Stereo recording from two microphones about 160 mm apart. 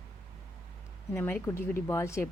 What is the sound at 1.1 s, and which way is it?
Speech, 15° left (ahead or behind).